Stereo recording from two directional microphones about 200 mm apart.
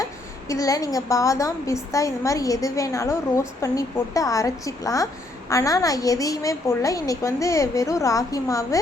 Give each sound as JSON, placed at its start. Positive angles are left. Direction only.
{"t": 0.0, "sound": "a woman's voice", "side_deg": 15}